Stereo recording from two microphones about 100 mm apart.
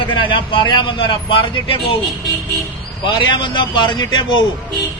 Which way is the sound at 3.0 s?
50° left (ahead or behind).